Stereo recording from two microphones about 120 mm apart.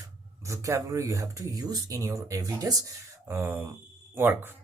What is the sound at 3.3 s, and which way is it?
Speech, 15° right (ahead or behind).